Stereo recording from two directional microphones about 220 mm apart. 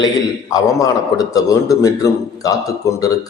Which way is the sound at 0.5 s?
15° left (ahead or behind).